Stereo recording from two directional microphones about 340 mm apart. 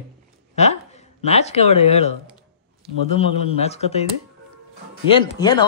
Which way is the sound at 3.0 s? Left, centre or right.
Centre.